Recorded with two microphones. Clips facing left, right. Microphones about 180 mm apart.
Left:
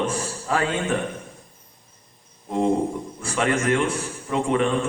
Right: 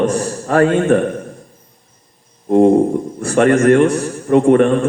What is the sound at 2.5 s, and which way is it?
A man's voice, 50° right (ahead or behind).